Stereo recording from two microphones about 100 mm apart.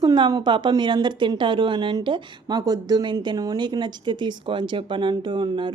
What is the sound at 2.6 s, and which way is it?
Speech, 40° right (ahead or behind).